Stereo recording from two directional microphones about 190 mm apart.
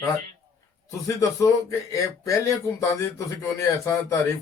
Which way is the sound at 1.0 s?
15° left (ahead or behind).